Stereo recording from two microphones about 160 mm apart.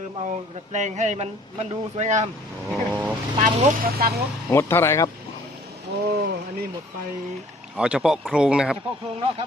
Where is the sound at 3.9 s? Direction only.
70° right (ahead or behind).